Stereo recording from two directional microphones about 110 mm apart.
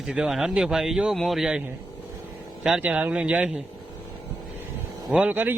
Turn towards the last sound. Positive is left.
turn(degrees=-15)  # may be behind; listen again after turning